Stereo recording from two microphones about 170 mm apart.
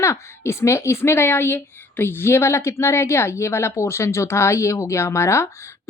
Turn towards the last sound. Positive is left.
turn(degrees=15)  # may be behind; listen again after turning